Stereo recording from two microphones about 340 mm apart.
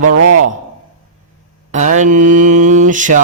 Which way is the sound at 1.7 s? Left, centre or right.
Right.